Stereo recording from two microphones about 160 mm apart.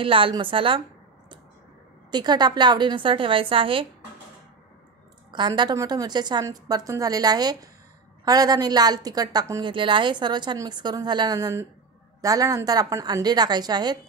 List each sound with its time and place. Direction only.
0.0 s a woman's voice: 35° right (ahead or behind)
2.0 s a woman's voice: 25° right (ahead or behind)
5.6 s a woman's voice: 25° right (ahead or behind)